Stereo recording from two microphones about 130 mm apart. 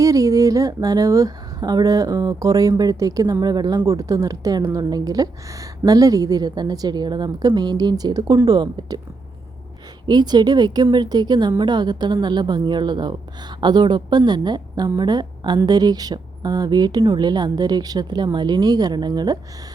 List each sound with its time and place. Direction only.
0.0 s a woman's voice: 25° right (ahead or behind)
10.1 s a woman's voice: 35° right (ahead or behind)